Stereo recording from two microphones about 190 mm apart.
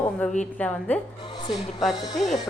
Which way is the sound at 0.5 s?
5° left (ahead or behind).